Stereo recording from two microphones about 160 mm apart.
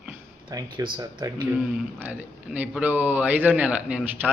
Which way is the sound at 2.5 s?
10° right (ahead or behind).